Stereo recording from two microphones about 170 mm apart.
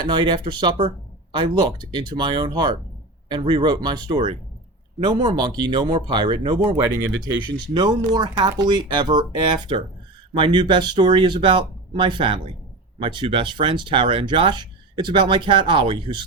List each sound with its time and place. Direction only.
0.0 s speech: 25° right (ahead or behind)